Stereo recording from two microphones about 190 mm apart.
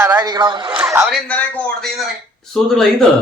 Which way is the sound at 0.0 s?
15° right (ahead or behind).